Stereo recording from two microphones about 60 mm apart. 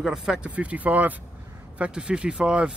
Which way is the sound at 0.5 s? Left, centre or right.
Right.